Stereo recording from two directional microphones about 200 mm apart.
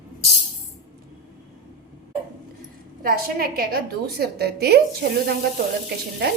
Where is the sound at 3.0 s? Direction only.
45° right (ahead or behind).